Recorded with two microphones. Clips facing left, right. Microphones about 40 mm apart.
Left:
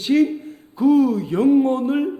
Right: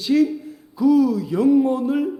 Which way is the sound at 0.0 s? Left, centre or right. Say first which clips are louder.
Left 1 dB; left.